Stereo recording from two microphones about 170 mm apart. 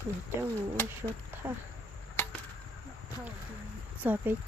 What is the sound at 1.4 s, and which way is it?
Speech, 15° right (ahead or behind).